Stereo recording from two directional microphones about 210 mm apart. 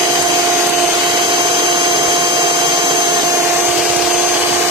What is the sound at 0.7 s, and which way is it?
Vacuum cleaner, 15° right (ahead or behind).